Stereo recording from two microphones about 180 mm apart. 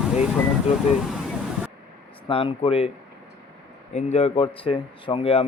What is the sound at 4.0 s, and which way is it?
Speech, 35° left (ahead or behind).